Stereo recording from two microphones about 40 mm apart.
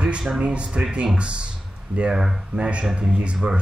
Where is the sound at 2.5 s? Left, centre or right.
Right.